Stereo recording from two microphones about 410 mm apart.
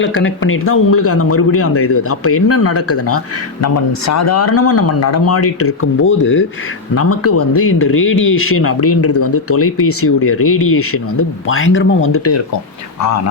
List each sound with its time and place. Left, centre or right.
0.0 s speech: left